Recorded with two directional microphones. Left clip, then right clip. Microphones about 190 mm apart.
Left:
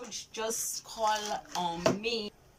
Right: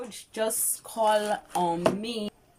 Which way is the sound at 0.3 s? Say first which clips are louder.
Right 6 dB; 45° right (ahead or behind).